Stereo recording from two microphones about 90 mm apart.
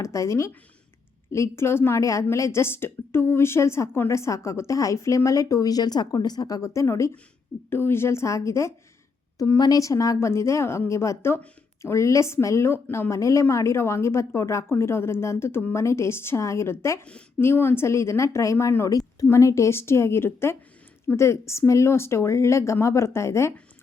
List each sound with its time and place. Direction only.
0.0 s speech: 35° left (ahead or behind)
9.4 s a woman's voice: 45° left (ahead or behind)